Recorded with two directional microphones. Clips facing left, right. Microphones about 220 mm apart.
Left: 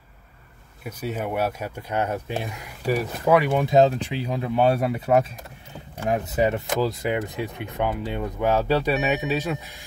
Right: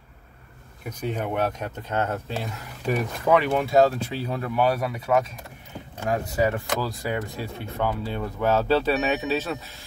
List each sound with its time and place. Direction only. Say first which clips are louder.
0.8 s speech: even; 5° left (ahead or behind); by 5.3 s 30° left (ahead or behind)
6.0 s speech: left 1 dB; 20° left (ahead or behind)